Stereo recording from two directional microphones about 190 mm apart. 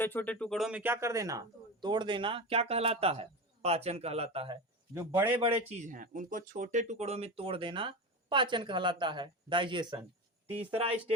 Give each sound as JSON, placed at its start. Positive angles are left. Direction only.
{"t": 0.0, "sound": "a man's voice", "side_deg": 10}
{"t": 4.9, "sound": "a man's voice", "side_deg": -15}
{"t": 5.4, "sound": "a man's voice", "side_deg": -30}
{"t": 5.9, "sound": "a man's voice", "side_deg": -45}